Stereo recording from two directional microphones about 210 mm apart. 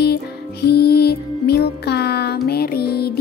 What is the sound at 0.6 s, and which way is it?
Music, 50° left (ahead or behind).